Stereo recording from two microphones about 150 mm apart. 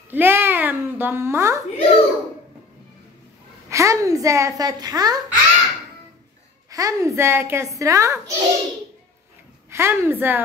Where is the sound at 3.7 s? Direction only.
20° right (ahead or behind).